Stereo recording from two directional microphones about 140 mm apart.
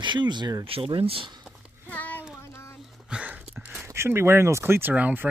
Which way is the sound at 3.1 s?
5° right (ahead or behind).